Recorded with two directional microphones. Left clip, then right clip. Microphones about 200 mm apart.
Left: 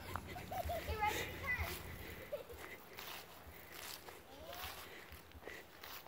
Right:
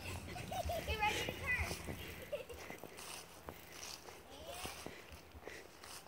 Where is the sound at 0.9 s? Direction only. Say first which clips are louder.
Right 2 dB; 5° left (ahead or behind).